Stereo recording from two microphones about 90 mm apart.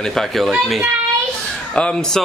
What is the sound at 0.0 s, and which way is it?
Speech, 5° left (ahead or behind).